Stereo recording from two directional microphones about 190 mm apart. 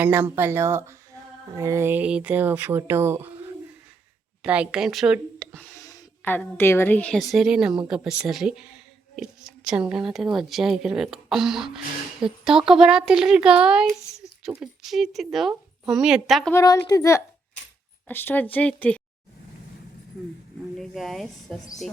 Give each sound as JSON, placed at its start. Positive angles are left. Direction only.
{"t": 0.0, "sound": "speech", "side_deg": -10}
{"t": 4.4, "sound": "speech", "side_deg": -5}
{"t": 16.5, "sound": "speech", "side_deg": 15}
{"t": 20.7, "sound": "speech", "side_deg": 0}